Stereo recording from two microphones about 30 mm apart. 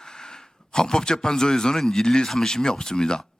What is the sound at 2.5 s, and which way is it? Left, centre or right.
Speech, left.